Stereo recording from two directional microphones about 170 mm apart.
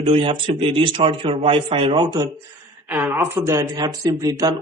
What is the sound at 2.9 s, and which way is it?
Speech, 10° right (ahead or behind).